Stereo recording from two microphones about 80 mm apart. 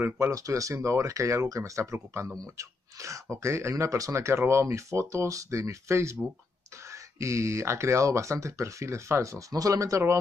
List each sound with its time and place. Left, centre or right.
0.3 s speech: right